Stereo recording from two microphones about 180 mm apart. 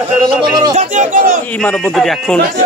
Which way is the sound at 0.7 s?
45° right (ahead or behind).